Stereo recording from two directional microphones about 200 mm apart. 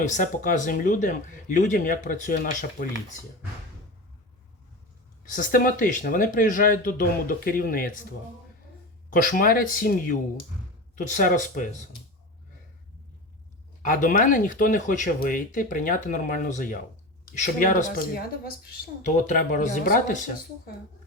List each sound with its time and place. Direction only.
0.0 s speech: 40° left (ahead or behind)
5.2 s speech: 40° left (ahead or behind)
9.0 s speech: 45° left (ahead or behind)
13.8 s speech: 40° left (ahead or behind)